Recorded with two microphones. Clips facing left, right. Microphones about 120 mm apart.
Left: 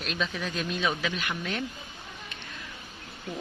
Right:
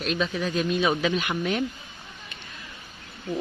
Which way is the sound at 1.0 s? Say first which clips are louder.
Right 7 dB; 20° right (ahead or behind).